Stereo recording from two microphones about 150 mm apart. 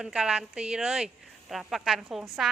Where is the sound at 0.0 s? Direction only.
5° right (ahead or behind).